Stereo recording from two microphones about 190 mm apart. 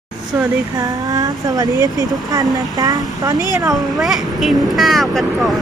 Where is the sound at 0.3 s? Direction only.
15° right (ahead or behind).